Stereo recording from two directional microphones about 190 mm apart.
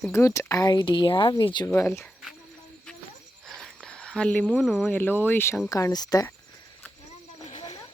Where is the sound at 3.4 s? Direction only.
5° left (ahead or behind).